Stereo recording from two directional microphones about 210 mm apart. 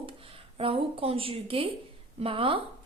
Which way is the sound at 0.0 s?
25° right (ahead or behind).